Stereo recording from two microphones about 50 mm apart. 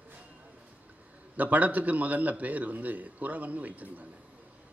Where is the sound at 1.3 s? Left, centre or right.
Right.